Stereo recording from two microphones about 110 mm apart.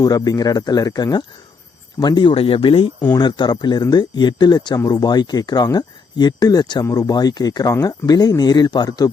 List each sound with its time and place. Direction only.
0.0 s speech: 35° left (ahead or behind)